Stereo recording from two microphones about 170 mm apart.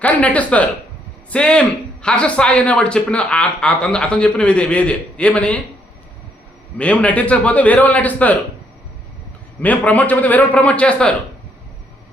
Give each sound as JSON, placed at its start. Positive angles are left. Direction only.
{"t": 0.0, "sound": "a man's voice", "side_deg": 10}
{"t": 6.7, "sound": "a man's voice", "side_deg": 10}
{"t": 9.6, "sound": "a man's voice", "side_deg": 10}